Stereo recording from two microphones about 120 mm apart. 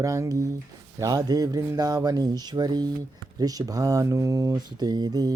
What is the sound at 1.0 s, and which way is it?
Mantra, 30° right (ahead or behind).